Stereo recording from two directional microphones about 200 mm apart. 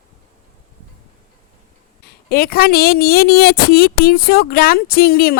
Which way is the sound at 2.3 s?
50° left (ahead or behind).